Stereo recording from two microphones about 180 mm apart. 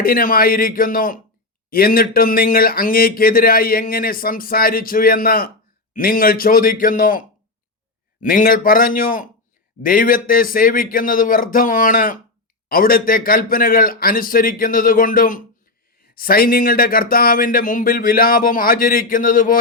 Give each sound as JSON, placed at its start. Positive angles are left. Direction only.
{"t": 0.0, "sound": "speech", "side_deg": 55}